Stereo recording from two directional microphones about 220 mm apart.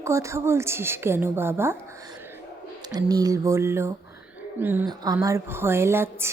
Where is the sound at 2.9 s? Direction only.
15° right (ahead or behind).